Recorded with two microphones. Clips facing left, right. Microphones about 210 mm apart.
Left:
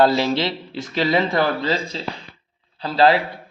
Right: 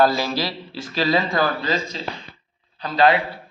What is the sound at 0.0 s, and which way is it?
A man's voice, 25° left (ahead or behind).